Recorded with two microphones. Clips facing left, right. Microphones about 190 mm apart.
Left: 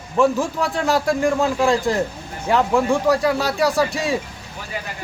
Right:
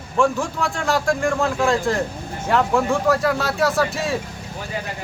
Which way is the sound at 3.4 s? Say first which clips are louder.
Left 1 dB; centre (ahead or behind).